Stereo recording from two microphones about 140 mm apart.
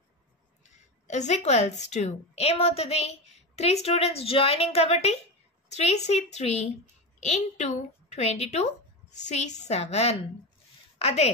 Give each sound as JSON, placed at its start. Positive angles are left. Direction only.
{"t": 0.7, "sound": "a woman's voice", "side_deg": 55}